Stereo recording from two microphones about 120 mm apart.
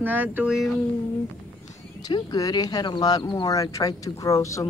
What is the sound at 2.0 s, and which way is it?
Speech, 35° left (ahead or behind).